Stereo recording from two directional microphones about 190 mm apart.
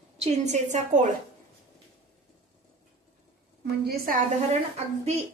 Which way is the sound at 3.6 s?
55° right (ahead or behind).